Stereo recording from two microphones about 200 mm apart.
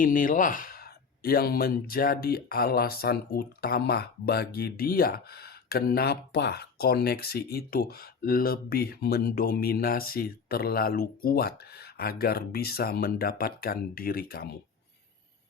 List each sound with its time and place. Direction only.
0.0 s speech: 45° left (ahead or behind)